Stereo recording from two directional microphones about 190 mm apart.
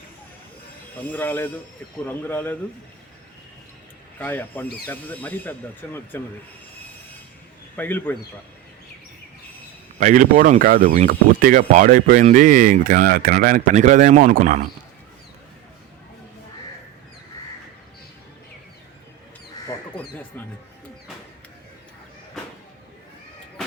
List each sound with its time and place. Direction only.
1.1 s speech: 10° left (ahead or behind)
4.2 s speech: 10° left (ahead or behind)
7.8 s speech: 10° left (ahead or behind)
10.0 s speech: 45° right (ahead or behind)